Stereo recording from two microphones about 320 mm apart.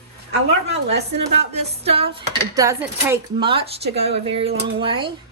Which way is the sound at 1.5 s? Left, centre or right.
Centre.